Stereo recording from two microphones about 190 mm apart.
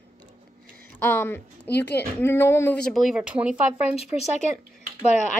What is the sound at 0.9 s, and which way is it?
Speech, 10° left (ahead or behind).